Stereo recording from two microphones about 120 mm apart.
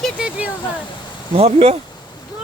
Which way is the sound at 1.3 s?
55° right (ahead or behind).